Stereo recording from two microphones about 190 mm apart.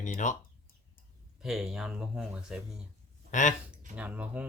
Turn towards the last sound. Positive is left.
turn(degrees=-10)  # may be behind; listen again after turning